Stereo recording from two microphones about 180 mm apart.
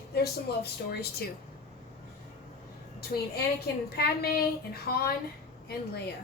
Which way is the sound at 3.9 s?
60° left (ahead or behind).